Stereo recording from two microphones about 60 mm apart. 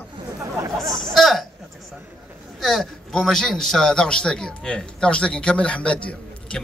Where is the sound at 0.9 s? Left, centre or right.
Centre.